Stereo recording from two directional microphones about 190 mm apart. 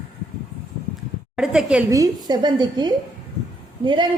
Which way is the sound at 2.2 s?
20° right (ahead or behind).